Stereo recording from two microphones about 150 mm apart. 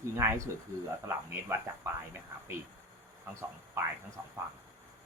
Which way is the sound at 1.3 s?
15° right (ahead or behind).